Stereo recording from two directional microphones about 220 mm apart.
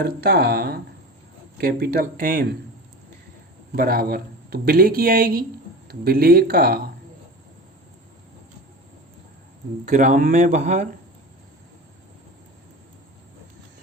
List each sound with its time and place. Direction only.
0.0 s speech: 45° right (ahead or behind)
3.8 s speech: 45° right (ahead or behind)
9.8 s speech: 35° right (ahead or behind)